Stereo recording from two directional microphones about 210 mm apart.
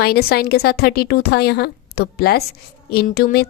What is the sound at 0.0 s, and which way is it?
A woman's voice, 50° left (ahead or behind).